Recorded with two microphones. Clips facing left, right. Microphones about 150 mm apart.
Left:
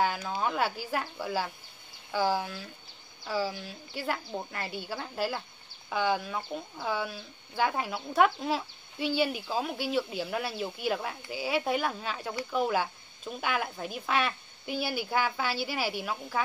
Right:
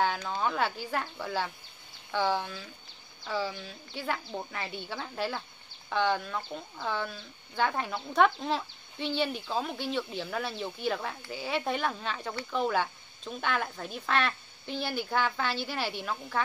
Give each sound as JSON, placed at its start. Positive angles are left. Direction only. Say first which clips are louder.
{"t": 0.0, "sound": "a woman's voice", "louder": "even", "side_deg": 10}